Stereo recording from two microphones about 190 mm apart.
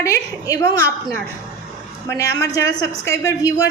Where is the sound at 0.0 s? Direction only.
15° left (ahead or behind).